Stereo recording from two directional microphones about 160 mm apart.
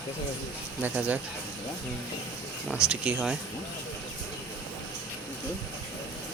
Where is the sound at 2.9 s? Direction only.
5° right (ahead or behind).